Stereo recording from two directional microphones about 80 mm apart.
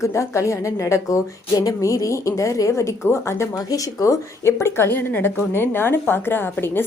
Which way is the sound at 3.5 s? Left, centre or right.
Left.